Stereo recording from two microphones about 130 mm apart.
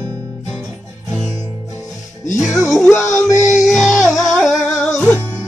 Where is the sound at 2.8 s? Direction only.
20° left (ahead or behind).